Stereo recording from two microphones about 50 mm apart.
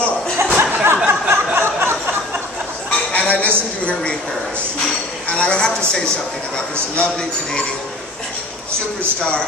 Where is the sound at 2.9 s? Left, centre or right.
Left.